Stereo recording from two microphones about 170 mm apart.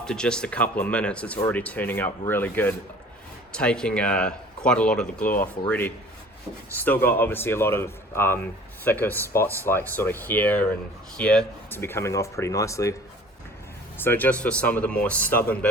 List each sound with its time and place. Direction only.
0.0 s speech: 5° left (ahead or behind)
14.0 s speech: 10° left (ahead or behind)